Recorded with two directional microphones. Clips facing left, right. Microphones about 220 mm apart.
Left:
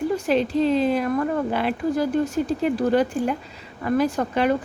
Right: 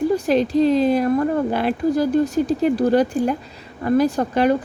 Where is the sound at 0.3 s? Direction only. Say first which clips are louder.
Right 3 dB; 40° right (ahead or behind).